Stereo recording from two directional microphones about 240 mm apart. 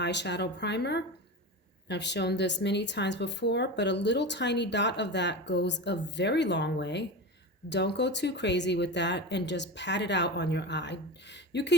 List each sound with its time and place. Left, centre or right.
0.0 s speech: left